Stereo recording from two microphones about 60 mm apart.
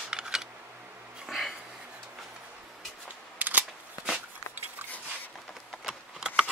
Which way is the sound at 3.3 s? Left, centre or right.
Right.